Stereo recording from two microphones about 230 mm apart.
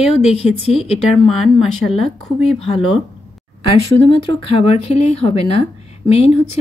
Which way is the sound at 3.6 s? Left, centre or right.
Left.